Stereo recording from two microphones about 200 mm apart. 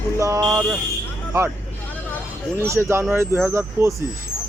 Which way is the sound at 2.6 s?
15° right (ahead or behind).